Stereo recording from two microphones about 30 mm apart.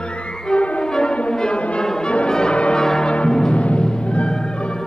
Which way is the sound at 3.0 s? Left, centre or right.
Left.